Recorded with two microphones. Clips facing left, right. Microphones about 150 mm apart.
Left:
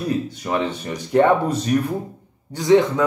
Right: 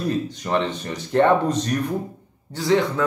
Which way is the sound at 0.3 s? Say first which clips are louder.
Even; 10° left (ahead or behind).